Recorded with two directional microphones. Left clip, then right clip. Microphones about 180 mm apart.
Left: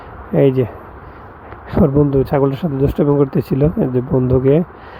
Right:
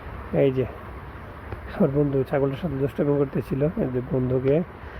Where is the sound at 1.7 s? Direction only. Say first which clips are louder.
Left 8 dB; 40° left (ahead or behind).